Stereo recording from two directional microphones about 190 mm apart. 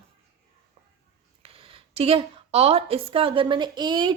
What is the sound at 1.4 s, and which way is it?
A woman's voice, 30° right (ahead or behind).